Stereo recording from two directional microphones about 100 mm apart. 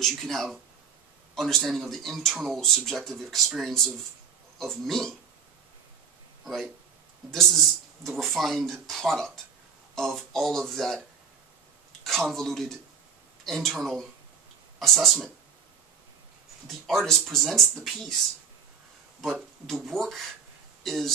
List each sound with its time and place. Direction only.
0.0 s speech: centre (ahead or behind)
6.4 s speech: centre (ahead or behind)
16.6 s speech: centre (ahead or behind)
19.6 s speech: centre (ahead or behind)